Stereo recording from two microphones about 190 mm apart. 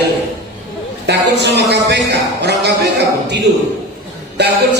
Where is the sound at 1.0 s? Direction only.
60° right (ahead or behind).